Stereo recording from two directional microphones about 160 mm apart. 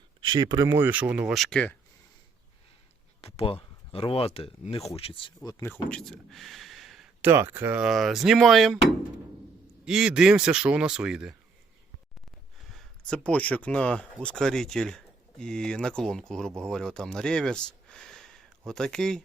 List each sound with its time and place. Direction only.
0.2 s speech: 25° right (ahead or behind); by 1.7 s 5° left (ahead or behind)
3.2 s speech: 40° left (ahead or behind); by 7.3 s centre (ahead or behind)
7.3 s speech: 15° right (ahead or behind); by 8.8 s centre (ahead or behind)
9.8 s speech: 5° right (ahead or behind)
12.7 s speech: 5° left (ahead or behind)